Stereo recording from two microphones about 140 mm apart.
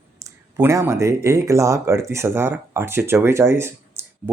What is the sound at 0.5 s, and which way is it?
Speech, 20° right (ahead or behind).